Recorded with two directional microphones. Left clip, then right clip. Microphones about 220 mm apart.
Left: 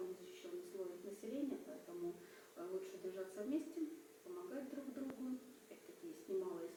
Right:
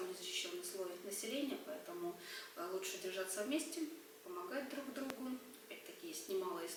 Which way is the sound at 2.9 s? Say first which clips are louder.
Right 5 dB; 5° left (ahead or behind).